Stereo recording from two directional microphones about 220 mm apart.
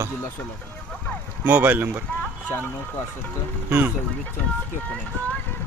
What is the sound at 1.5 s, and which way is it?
Speech, 5° right (ahead or behind).